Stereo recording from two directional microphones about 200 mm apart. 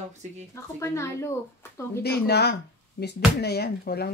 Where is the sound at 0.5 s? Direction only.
15° left (ahead or behind).